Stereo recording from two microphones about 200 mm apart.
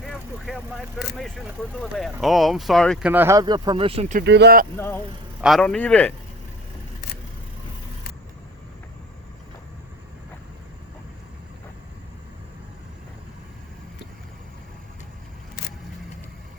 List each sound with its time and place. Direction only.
0.0 s vehicle: centre (ahead or behind)
1.7 s speech: centre (ahead or behind)
3.1 s speech: 10° right (ahead or behind); by 4.0 s 25° right (ahead or behind)
4.2 s speech: 55° right (ahead or behind)
4.8 s speech: 10° left (ahead or behind)
5.4 s speech: centre (ahead or behind)